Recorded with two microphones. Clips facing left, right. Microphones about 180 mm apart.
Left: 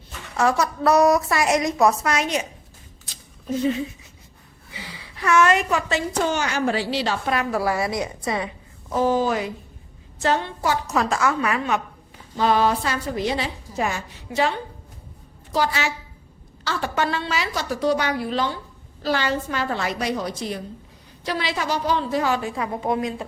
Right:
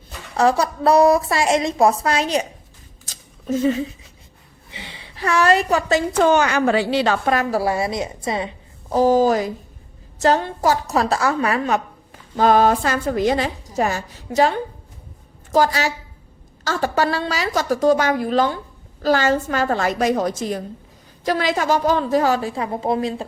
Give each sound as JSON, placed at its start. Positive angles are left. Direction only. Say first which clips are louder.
{"t": 0.3, "sound": "a woman's voice", "louder": "right 3 dB", "side_deg": -30}
{"t": 3.1, "sound": "a sound", "louder": "right 3 dB", "side_deg": -45}
{"t": 3.5, "sound": "a woman's voice", "louder": "right 3 dB", "side_deg": -45}
{"t": 4.7, "sound": "a woman's voice", "louder": "right 1 dB", "side_deg": -25}
{"t": 6.1, "sound": "a woman's voice", "louder": "right 8 dB", "side_deg": -55}
{"t": 7.3, "sound": "a woman's voice", "louder": "right 3 dB", "side_deg": -30}
{"t": 9.0, "sound": "a woman's voice", "louder": "right 5 dB", "side_deg": -40}
{"t": 12.4, "sound": "a woman's voice", "louder": "right 5 dB", "side_deg": -45}